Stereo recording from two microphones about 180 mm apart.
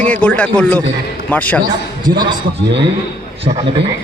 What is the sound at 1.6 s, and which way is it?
Speech, 25° right (ahead or behind).